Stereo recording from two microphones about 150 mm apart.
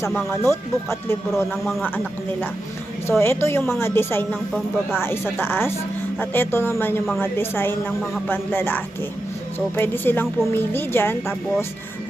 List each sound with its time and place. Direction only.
0.0 s a woman's voice: 10° left (ahead or behind)
3.1 s a woman's voice: 15° left (ahead or behind)